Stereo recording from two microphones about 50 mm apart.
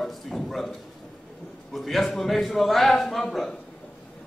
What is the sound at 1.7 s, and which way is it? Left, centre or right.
A man's voice, centre.